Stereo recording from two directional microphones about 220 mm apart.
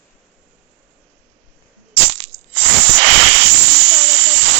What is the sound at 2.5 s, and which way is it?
Hiss, 50° right (ahead or behind).